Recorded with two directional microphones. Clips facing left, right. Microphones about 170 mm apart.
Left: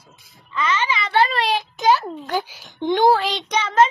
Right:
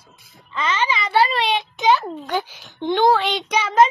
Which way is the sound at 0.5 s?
20° right (ahead or behind).